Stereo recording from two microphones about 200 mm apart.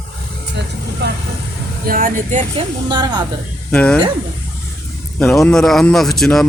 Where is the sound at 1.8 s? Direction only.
45° right (ahead or behind).